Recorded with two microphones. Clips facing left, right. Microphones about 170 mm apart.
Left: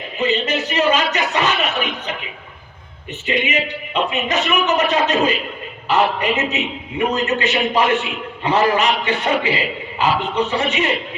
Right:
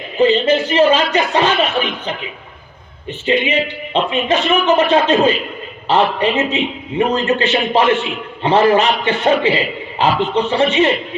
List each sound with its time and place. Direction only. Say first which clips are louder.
0.2 s a man's voice: right 7 dB; 30° right (ahead or behind)